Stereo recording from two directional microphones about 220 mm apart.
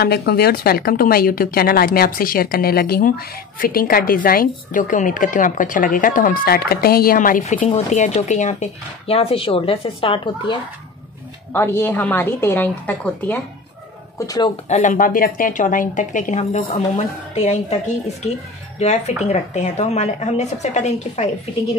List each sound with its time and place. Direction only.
0.0 s speech: 45° left (ahead or behind); by 10.6 s 20° left (ahead or behind)
11.5 s a woman's voice: 10° left (ahead or behind)
14.7 s speech: 35° left (ahead or behind)
18.8 s speech: 30° left (ahead or behind)